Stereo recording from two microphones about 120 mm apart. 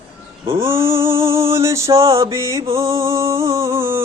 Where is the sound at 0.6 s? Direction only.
20° right (ahead or behind).